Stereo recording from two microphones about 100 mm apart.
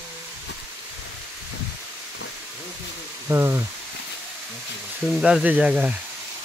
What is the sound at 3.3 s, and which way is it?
Speech, 25° right (ahead or behind).